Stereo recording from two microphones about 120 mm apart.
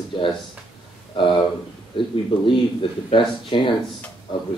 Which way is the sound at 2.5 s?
45° left (ahead or behind).